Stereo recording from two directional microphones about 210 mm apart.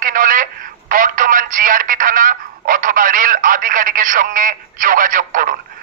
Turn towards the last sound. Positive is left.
turn(degrees=-40)  # may be behind; listen again after turning